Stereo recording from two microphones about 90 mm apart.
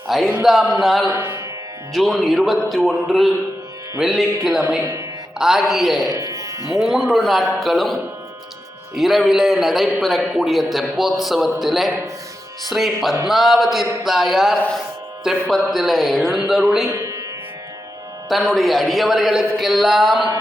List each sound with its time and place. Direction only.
0.1 s a man's voice: centre (ahead or behind)
1.1 s music: 30° right (ahead or behind)
1.9 s a man's voice: centre (ahead or behind)
4.8 s speech: 35° right (ahead or behind)
5.4 s a man's voice: 5° right (ahead or behind)
6.1 s speech: 40° right (ahead or behind)
6.7 s a man's voice: centre (ahead or behind)
9.0 s a man's voice: centre (ahead or behind)
16.8 s music: 35° right (ahead or behind)
18.3 s a man's voice: centre (ahead or behind)